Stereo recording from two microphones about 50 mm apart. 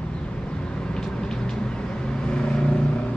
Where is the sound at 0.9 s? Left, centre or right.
Centre.